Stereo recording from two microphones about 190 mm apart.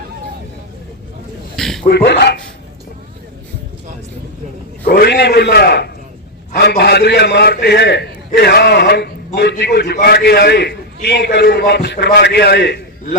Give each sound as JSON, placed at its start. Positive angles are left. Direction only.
{"t": 1.5, "sound": "a sound", "side_deg": 0}
{"t": 1.9, "sound": "a man's voice", "side_deg": 60}
{"t": 4.9, "sound": "a man's voice", "side_deg": 55}